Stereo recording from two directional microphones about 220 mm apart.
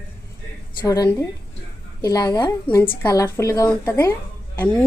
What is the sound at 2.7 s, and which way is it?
A woman's voice, 10° left (ahead or behind).